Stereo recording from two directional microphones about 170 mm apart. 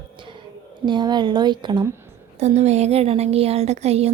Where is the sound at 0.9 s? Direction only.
25° right (ahead or behind).